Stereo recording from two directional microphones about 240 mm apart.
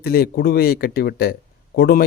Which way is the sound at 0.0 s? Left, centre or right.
Left.